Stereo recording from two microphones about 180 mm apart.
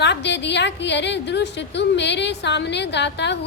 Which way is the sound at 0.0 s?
75° left (ahead or behind).